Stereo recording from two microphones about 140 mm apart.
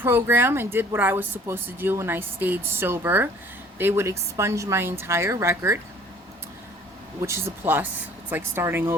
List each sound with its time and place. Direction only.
0.0 s a woman's voice: 15° right (ahead or behind)
7.3 s speech: 20° right (ahead or behind)